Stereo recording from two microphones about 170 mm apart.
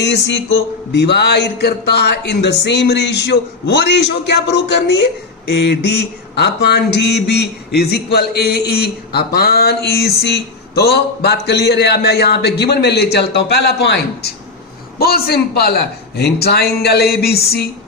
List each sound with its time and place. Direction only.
0.0 s speech: 90° left
5.5 s speech: 75° left (ahead or behind)
7.8 s speech: 70° left (ahead or behind)